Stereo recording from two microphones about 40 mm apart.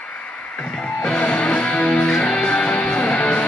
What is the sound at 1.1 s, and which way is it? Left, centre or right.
Music, left.